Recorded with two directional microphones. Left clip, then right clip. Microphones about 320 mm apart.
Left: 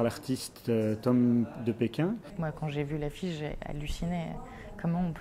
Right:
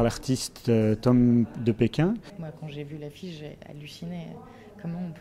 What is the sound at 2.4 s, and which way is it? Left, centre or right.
Speech, left.